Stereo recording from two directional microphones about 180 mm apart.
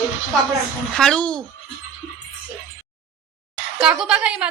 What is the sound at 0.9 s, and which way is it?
Speech, 5° left (ahead or behind).